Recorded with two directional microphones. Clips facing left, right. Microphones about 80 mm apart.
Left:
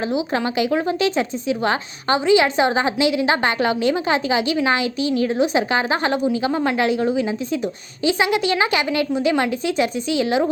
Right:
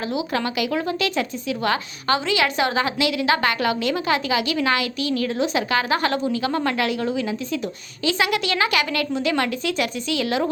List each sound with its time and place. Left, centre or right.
0.0 s speech: left